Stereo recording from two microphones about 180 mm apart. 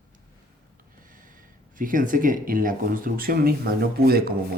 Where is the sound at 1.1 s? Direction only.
50° right (ahead or behind).